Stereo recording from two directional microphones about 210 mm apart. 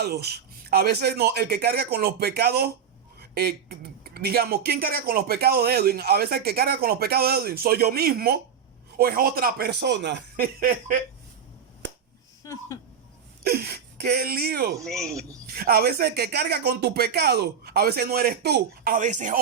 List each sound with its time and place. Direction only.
0.0 s speech: 50° right (ahead or behind)
12.4 s speech: 15° left (ahead or behind)
13.4 s speech: 50° right (ahead or behind)
14.8 s speech: 5° left (ahead or behind)
15.5 s speech: 45° right (ahead or behind)
18.9 s speech: 35° right (ahead or behind)